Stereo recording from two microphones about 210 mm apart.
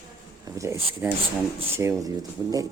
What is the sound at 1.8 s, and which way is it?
Speech, 15° right (ahead or behind).